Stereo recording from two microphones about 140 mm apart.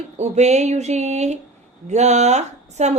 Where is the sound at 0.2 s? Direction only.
55° right (ahead or behind).